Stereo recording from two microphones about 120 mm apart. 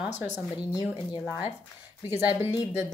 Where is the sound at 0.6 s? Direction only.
35° left (ahead or behind).